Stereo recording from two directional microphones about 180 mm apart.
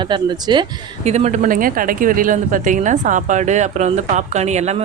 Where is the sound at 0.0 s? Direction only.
25° right (ahead or behind).